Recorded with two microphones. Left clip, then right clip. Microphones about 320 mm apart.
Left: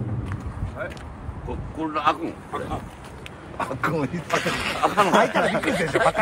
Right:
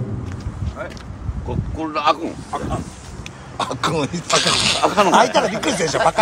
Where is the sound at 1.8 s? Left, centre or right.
Right.